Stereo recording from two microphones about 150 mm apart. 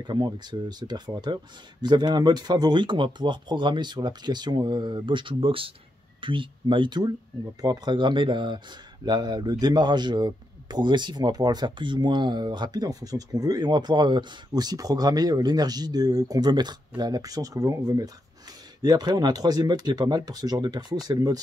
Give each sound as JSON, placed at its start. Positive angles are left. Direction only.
{"t": 0.0, "sound": "speech", "side_deg": -30}